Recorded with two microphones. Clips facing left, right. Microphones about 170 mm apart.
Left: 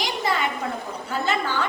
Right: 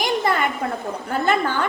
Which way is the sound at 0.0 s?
55° right (ahead or behind).